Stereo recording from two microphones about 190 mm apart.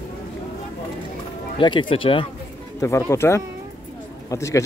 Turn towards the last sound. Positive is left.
turn(degrees=15)  # may be behind; listen again after turning